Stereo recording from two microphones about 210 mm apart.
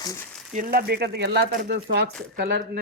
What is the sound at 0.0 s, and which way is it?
Speech, 15° left (ahead or behind).